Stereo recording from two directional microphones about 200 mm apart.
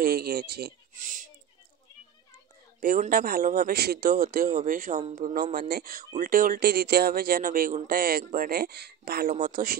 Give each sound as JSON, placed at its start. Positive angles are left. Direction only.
{"t": 0.0, "sound": "speech", "side_deg": -50}
{"t": 2.8, "sound": "speech", "side_deg": -45}